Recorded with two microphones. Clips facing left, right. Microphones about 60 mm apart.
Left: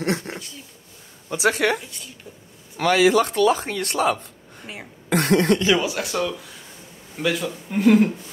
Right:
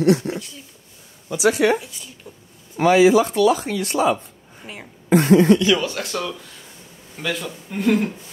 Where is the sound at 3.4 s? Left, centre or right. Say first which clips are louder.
Right 2 dB; left.